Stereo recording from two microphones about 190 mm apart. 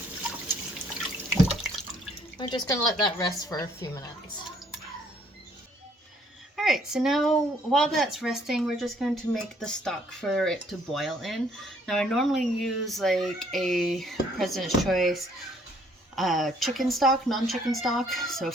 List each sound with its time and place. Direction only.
2.4 s speech: 20° left (ahead or behind)
6.6 s speech: centre (ahead or behind)